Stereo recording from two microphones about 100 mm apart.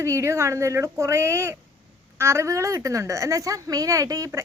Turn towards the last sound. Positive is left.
turn(degrees=-35)  # may be behind; listen again after turning